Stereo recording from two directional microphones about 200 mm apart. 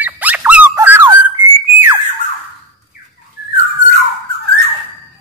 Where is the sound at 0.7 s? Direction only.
10° right (ahead or behind).